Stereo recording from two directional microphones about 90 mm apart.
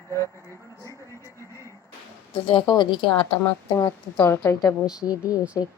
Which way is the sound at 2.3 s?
70° left (ahead or behind).